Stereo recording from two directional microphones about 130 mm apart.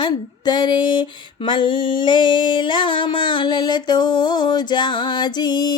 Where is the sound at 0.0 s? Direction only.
35° left (ahead or behind).